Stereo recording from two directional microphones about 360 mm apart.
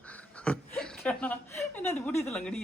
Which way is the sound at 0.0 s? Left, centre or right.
Centre.